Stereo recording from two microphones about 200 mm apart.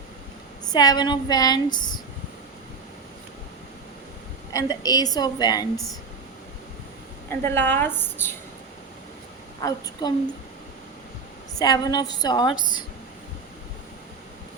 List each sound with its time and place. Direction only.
0.7 s a woman's voice: 20° left (ahead or behind)
4.5 s a woman's voice: 20° left (ahead or behind)
7.3 s a woman's voice: 10° left (ahead or behind)
9.6 s a woman's voice: 20° left (ahead or behind)
11.6 s a woman's voice: 20° left (ahead or behind)